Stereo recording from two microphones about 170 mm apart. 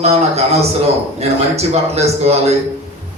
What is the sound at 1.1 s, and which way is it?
A man's voice, 40° right (ahead or behind).